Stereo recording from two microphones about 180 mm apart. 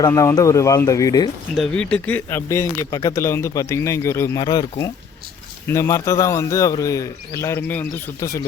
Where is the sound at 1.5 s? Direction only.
5° left (ahead or behind); by 4.6 s 20° left (ahead or behind).